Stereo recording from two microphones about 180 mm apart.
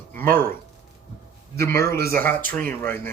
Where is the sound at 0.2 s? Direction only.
10° left (ahead or behind).